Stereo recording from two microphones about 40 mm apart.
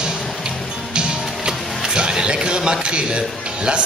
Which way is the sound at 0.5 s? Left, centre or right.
Right.